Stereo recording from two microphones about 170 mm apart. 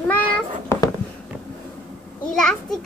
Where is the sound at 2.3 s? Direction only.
5° left (ahead or behind).